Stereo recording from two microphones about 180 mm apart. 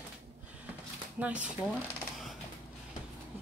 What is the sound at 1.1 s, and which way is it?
Speech, 10° right (ahead or behind).